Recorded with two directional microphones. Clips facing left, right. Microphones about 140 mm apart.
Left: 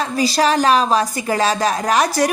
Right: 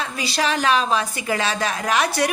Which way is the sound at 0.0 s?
40° left (ahead or behind).